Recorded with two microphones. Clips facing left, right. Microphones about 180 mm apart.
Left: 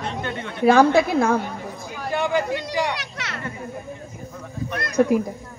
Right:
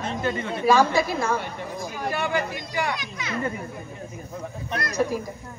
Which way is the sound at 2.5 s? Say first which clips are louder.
Left 4 dB; 75° left (ahead or behind).